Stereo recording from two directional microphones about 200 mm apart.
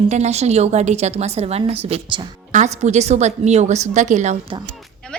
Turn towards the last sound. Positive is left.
turn(degrees=-35)  # may be behind; listen again after turning